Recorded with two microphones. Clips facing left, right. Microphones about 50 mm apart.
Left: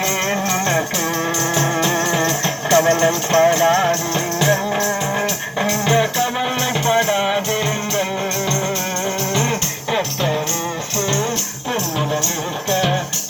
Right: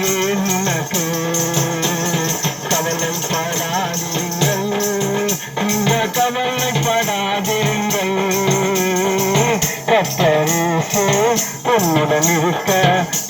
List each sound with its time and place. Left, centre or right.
1.5 s music: centre
3.3 s music: left
5.6 s music: centre
9.4 s music: right
11.2 s music: right